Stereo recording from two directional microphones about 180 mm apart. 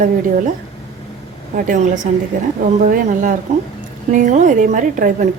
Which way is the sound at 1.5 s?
45° right (ahead or behind).